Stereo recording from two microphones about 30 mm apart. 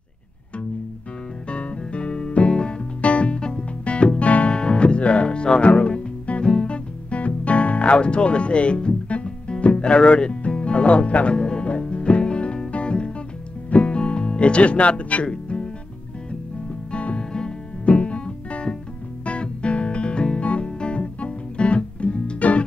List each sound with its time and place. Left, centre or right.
1.5 s music: left
3.0 s music: left
3.3 s music: left
4.2 s music: left
4.5 s music: left
9.7 s speech: left
11.3 s music: left
11.8 s music: left
14.2 s speech: left
15.2 s music: left
16.9 s music: left
17.2 s music: left
17.8 s music: left
22.4 s music: left